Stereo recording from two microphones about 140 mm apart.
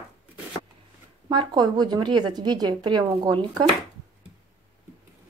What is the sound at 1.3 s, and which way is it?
A woman's voice, 30° right (ahead or behind).